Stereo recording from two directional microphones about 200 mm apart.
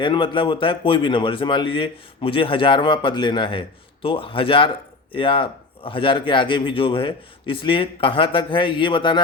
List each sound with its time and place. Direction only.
0.0 s a man's voice: 25° left (ahead or behind)